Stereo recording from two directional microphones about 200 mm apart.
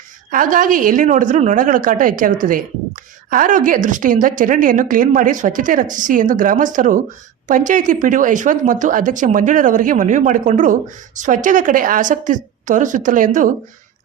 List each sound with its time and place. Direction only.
0.3 s a woman's voice: 45° right (ahead or behind)